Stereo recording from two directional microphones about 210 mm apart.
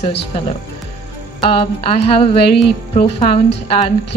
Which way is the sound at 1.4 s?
25° left (ahead or behind).